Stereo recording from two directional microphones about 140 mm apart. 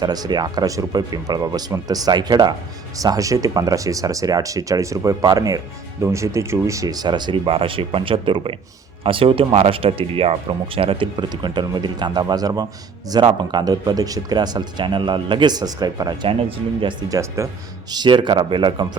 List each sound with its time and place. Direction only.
0.0 s speech: 30° right (ahead or behind)
16.4 s speech: 40° right (ahead or behind)
17.1 s speech: 20° right (ahead or behind)
17.9 s speech: 35° right (ahead or behind)